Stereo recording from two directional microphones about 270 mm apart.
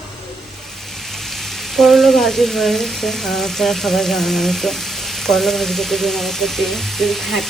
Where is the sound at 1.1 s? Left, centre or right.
Centre.